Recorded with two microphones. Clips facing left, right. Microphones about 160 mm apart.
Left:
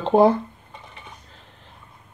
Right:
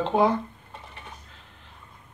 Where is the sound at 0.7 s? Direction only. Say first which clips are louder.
Even; centre (ahead or behind).